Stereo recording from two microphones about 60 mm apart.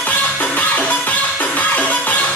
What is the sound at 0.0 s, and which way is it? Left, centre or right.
Music, left.